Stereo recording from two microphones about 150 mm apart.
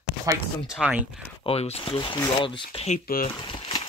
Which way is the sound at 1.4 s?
40° left (ahead or behind).